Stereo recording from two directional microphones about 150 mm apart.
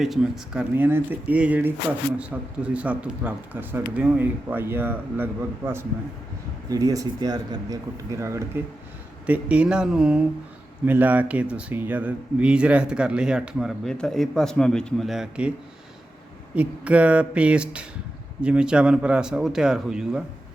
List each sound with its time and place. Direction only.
0.0 s a man's voice: centre (ahead or behind); by 8.6 s 20° right (ahead or behind)
9.2 s speech: 10° right (ahead or behind)
16.6 s speech: 10° right (ahead or behind)